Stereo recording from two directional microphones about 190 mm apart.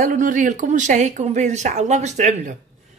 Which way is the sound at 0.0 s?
45° right (ahead or behind).